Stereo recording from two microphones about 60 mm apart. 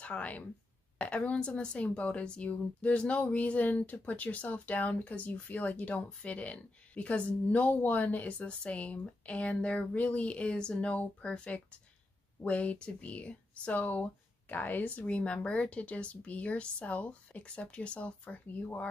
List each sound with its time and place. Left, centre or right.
0.0 s a woman's voice: left